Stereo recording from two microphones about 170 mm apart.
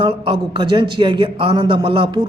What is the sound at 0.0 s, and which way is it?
A man's voice, 30° right (ahead or behind).